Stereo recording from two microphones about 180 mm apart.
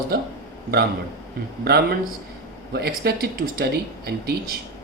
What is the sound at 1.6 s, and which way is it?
Speech, 65° right (ahead or behind).